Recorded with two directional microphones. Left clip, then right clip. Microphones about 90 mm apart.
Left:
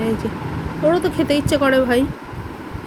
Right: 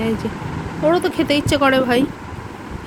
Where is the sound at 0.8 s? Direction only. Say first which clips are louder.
Even; 35° right (ahead or behind).